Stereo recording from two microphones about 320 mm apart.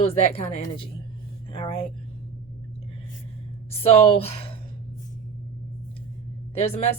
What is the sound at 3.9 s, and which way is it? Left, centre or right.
Speech, centre.